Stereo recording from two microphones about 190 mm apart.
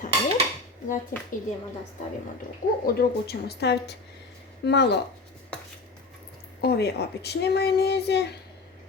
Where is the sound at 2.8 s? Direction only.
55° left (ahead or behind).